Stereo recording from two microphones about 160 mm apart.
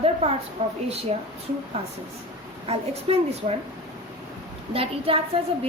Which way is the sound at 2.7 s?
40° right (ahead or behind).